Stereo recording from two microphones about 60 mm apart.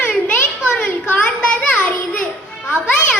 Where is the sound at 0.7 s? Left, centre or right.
Centre.